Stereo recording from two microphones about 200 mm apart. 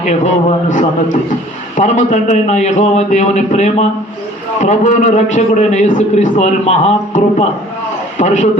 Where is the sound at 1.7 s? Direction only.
40° left (ahead or behind).